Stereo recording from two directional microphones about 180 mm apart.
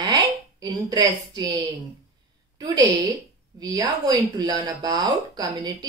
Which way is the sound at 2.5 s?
20° right (ahead or behind).